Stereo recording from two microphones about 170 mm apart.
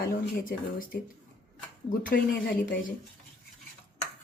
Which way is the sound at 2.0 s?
60° left (ahead or behind).